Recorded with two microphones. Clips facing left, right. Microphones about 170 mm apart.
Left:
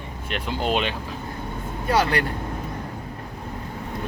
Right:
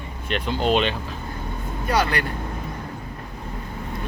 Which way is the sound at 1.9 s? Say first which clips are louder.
Left 1 dB; 25° left (ahead or behind).